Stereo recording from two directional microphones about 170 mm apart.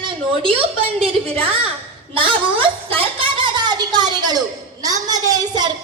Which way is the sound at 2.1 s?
30° right (ahead or behind).